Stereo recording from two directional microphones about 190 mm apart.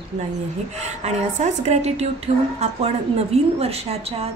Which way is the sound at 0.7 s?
35° right (ahead or behind).